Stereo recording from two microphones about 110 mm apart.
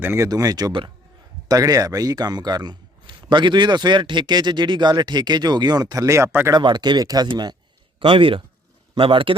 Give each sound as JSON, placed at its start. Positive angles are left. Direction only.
{"t": 0.0, "sound": "speech", "side_deg": -20}
{"t": 0.3, "sound": "speech", "side_deg": -35}
{"t": 6.5, "sound": "speech", "side_deg": -45}
{"t": 7.9, "sound": "speech", "side_deg": -55}